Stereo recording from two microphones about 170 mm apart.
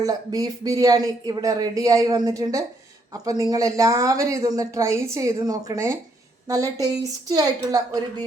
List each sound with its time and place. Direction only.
0.0 s speech: 20° right (ahead or behind)